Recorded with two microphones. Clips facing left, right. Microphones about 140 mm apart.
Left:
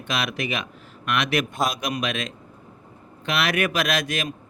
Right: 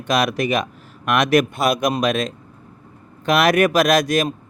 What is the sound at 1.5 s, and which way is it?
Speech, 65° right (ahead or behind).